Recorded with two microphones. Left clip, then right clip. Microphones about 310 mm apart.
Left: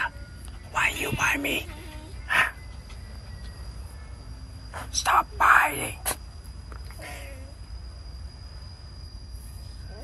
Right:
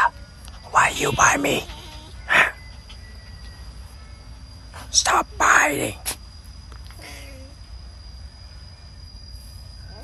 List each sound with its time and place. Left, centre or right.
0.7 s speech: centre
2.2 s cricket: centre
4.9 s speech: centre
7.0 s a sound: centre